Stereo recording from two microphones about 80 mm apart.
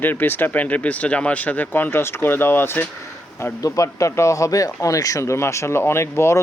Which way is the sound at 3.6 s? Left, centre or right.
Left.